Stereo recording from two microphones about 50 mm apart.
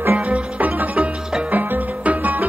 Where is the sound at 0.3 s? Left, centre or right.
Right.